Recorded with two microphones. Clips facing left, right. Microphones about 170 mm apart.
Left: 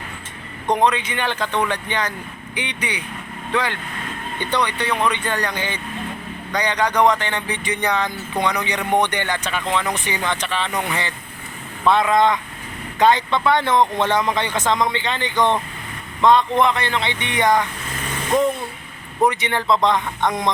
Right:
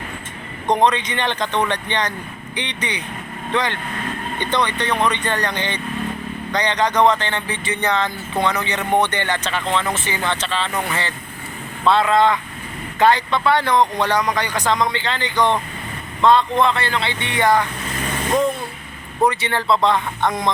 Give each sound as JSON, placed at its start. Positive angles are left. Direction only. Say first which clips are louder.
{"t": 0.7, "sound": "speech", "louder": "right 1 dB", "side_deg": 10}
{"t": 19.3, "sound": "speech", "louder": "even", "side_deg": 20}